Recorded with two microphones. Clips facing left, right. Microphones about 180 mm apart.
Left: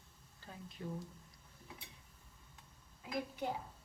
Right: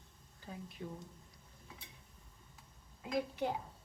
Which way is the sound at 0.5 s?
10° right (ahead or behind).